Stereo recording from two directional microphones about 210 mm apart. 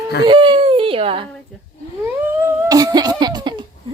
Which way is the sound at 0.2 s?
20° right (ahead or behind).